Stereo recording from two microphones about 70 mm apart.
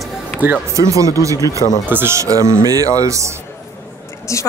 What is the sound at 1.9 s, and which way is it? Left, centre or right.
Speech, right.